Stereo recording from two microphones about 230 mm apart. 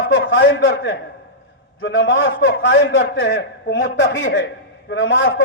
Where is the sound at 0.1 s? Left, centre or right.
Left.